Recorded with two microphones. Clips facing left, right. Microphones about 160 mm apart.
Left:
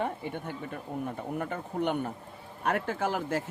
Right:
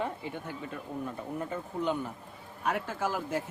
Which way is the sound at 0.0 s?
60° left (ahead or behind).